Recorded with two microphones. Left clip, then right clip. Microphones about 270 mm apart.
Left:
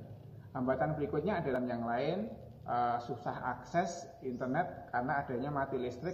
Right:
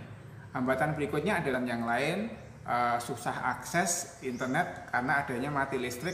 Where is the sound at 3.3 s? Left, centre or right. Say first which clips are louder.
Right 7 dB; right.